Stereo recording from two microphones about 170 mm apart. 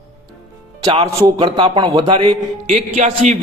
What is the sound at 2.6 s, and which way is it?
Speech, 45° right (ahead or behind).